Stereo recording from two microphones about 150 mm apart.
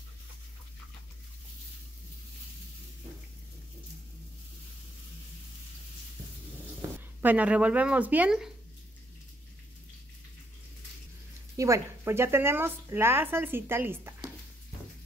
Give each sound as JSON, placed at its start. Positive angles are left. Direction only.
{"t": 7.2, "sound": "a woman's voice", "side_deg": -10}
{"t": 11.5, "sound": "a woman's voice", "side_deg": -20}